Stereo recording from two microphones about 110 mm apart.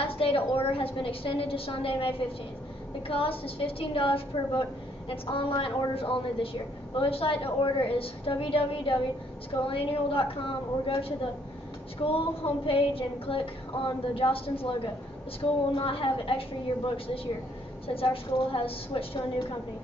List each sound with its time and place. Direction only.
0.0 s a woman's voice: 55° left (ahead or behind)